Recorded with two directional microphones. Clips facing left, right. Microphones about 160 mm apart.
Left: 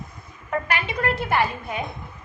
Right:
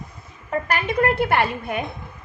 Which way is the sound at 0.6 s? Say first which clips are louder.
Right 9 dB; 40° right (ahead or behind).